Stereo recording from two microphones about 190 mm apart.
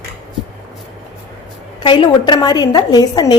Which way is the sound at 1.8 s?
25° left (ahead or behind).